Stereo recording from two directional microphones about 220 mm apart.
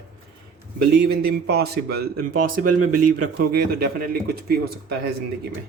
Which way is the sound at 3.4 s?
40° right (ahead or behind).